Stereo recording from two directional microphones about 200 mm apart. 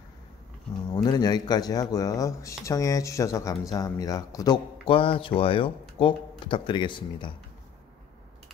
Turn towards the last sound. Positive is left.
turn(degrees=25)  # may be behind; listen again after turning